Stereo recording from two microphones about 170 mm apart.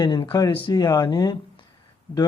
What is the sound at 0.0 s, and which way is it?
Speech, 30° left (ahead or behind).